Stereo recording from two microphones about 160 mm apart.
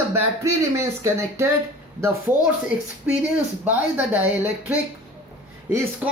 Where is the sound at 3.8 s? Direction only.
10° right (ahead or behind).